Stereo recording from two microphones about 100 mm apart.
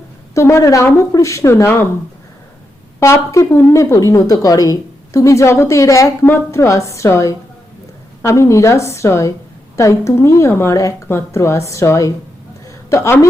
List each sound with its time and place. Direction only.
0.3 s speech: 30° left (ahead or behind)
3.0 s speech: 30° left (ahead or behind)
12.6 s a sound: 30° left (ahead or behind)